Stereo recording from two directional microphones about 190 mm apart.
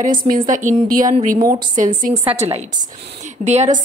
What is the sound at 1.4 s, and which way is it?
Speech, 20° right (ahead or behind).